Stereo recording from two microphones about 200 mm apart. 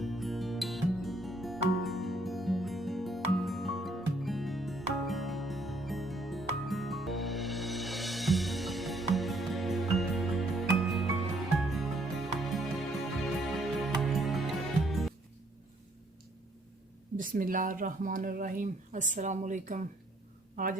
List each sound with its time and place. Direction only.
0.0 s music: centre (ahead or behind)
17.2 s speech: 45° right (ahead or behind)